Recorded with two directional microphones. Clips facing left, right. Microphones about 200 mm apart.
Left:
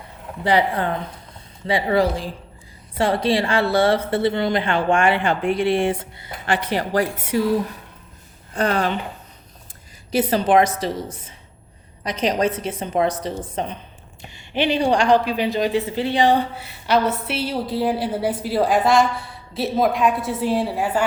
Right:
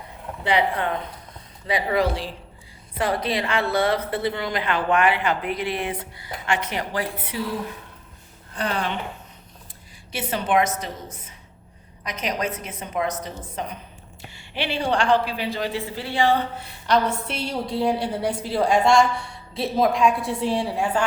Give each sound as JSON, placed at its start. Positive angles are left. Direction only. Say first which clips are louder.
{"t": 0.4, "sound": "a woman's voice", "louder": "left 3 dB", "side_deg": 35}
{"t": 8.5, "sound": "speech", "louder": "left 6 dB", "side_deg": 45}
{"t": 10.1, "sound": "a woman's voice", "louder": "left 6 dB", "side_deg": 40}
{"t": 14.3, "sound": "a woman's voice", "louder": "left 7 dB", "side_deg": 20}